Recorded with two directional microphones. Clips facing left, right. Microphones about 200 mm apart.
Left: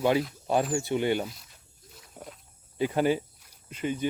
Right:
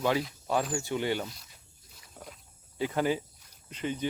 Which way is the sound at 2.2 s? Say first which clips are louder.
Left 3 dB; 15° left (ahead or behind).